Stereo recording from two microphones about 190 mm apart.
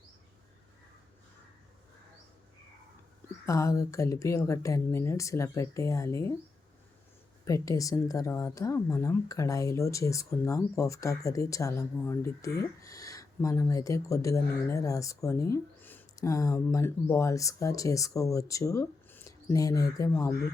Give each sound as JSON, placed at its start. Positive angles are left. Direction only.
{"t": 3.4, "sound": "speech", "side_deg": 15}
{"t": 7.4, "sound": "speech", "side_deg": 15}